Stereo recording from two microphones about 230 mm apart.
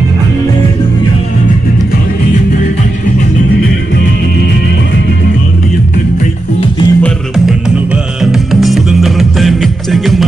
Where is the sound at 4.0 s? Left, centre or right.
Left.